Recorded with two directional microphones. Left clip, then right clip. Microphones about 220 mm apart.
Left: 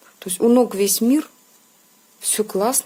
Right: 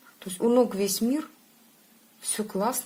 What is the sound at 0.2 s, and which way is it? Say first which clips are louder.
A woman's voice: left 6 dB; 40° left (ahead or behind).